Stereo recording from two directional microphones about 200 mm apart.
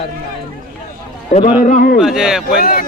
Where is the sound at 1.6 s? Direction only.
40° left (ahead or behind).